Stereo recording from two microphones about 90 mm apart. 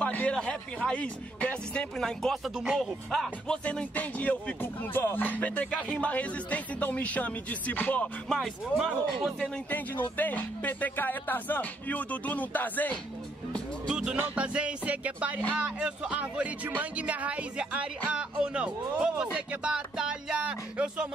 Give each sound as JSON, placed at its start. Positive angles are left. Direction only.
{"t": 0.0, "sound": "speech", "side_deg": 15}
{"t": 3.6, "sound": "speech", "side_deg": 15}
{"t": 8.3, "sound": "speech", "side_deg": 0}
{"t": 9.7, "sound": "speech", "side_deg": 20}
{"t": 13.8, "sound": "speech", "side_deg": -5}